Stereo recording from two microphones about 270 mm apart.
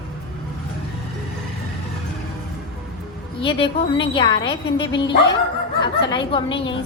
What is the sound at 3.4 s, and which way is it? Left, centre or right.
A woman's voice, centre.